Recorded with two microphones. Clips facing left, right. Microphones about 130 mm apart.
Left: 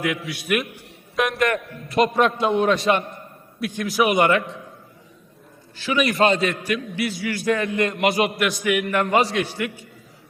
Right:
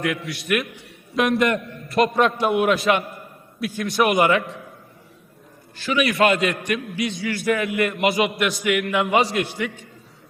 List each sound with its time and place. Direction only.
0.0 s a man's voice: centre (ahead or behind)
6.1 s a man's voice: 25° left (ahead or behind)
6.4 s a man's voice: 5° left (ahead or behind)
7.5 s a man's voice: 10° right (ahead or behind)
9.6 s a man's voice: 10° left (ahead or behind)